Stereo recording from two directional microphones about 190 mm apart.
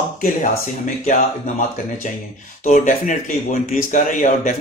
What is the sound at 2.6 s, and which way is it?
A man's voice, 45° left (ahead or behind).